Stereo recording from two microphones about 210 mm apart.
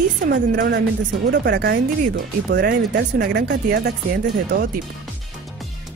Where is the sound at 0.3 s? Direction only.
50° right (ahead or behind).